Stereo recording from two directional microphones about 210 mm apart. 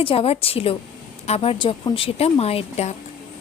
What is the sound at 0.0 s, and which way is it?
Speech, 25° left (ahead or behind).